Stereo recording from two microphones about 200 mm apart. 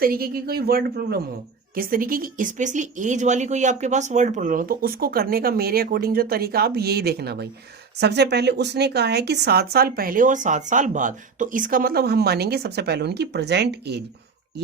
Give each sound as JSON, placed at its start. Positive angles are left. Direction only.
{"t": 0.0, "sound": "speech", "side_deg": -50}